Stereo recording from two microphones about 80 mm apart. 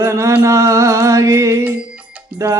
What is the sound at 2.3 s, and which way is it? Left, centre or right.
Speech, right.